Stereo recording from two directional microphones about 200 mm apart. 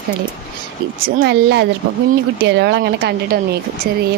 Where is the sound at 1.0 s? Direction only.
55° right (ahead or behind).